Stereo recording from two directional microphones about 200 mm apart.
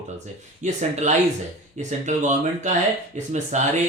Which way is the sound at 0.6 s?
35° right (ahead or behind).